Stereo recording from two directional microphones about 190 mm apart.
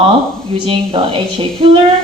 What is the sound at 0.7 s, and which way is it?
A woman's voice, 30° right (ahead or behind).